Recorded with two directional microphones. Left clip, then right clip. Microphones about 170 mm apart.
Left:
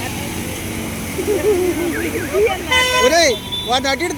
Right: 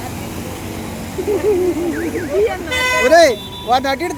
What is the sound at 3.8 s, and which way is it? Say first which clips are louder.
Speech: even; 15° right (ahead or behind).